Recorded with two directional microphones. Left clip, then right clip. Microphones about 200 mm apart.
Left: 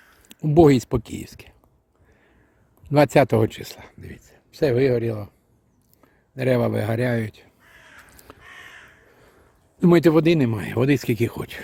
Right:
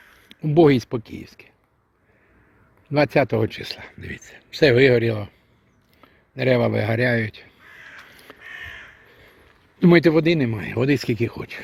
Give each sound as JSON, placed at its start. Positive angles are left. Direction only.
{"t": 0.3, "sound": "speech", "side_deg": 15}
{"t": 2.9, "sound": "speech", "side_deg": 15}
{"t": 4.3, "sound": "speech", "side_deg": -10}
{"t": 8.1, "sound": "a sound", "side_deg": 5}
{"t": 10.0, "sound": "speech", "side_deg": 20}